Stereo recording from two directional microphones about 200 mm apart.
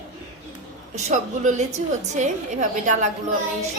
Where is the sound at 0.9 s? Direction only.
35° right (ahead or behind).